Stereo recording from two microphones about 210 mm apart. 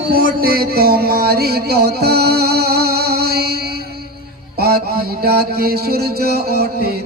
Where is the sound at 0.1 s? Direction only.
45° right (ahead or behind).